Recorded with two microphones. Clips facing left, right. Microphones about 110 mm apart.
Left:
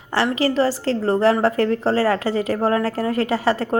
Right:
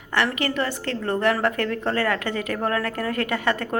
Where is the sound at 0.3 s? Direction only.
25° left (ahead or behind).